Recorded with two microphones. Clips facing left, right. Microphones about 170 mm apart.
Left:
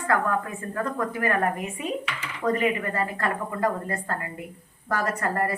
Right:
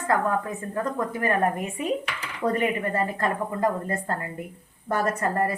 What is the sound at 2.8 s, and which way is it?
A woman's voice, 25° right (ahead or behind).